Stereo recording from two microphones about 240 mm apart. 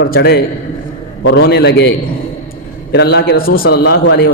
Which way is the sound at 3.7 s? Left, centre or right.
Left.